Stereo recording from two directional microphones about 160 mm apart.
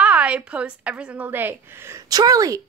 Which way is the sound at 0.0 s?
10° right (ahead or behind).